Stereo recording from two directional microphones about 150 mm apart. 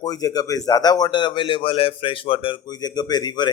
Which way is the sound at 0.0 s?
25° left (ahead or behind).